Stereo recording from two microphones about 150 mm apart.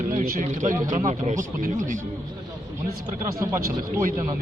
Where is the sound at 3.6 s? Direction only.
65° right (ahead or behind).